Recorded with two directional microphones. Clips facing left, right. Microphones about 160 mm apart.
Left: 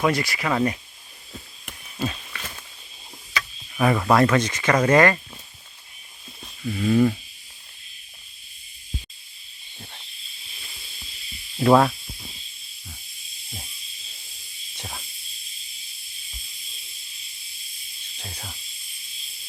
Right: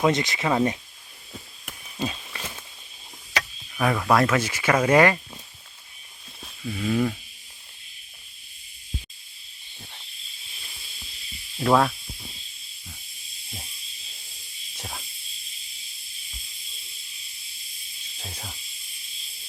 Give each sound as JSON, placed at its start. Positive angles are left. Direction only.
{"t": 0.0, "sound": "speech", "side_deg": -20}
{"t": 2.0, "sound": "a sound", "side_deg": -15}
{"t": 3.8, "sound": "speech", "side_deg": 0}
{"t": 6.4, "sound": "speech", "side_deg": 0}
{"t": 11.6, "sound": "speech", "side_deg": 5}
{"t": 14.8, "sound": "snake", "side_deg": 0}
{"t": 18.2, "sound": "snake", "side_deg": -5}